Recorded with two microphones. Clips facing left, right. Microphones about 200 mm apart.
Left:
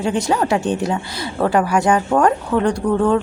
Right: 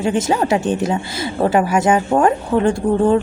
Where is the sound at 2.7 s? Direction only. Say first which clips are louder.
Right 2 dB; 25° right (ahead or behind).